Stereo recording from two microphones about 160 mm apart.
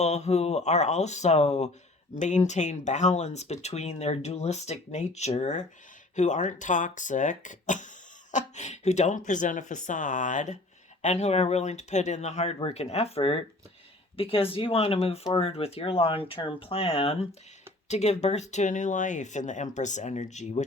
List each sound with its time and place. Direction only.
0.0 s speech: 45° left (ahead or behind)